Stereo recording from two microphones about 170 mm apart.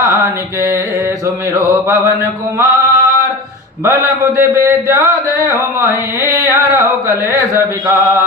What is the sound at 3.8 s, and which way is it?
Mantra, 15° right (ahead or behind).